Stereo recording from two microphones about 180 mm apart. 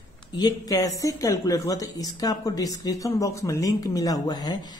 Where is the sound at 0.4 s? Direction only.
20° left (ahead or behind).